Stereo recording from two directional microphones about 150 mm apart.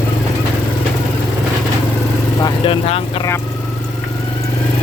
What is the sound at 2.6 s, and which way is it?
Vehicle, 40° left (ahead or behind).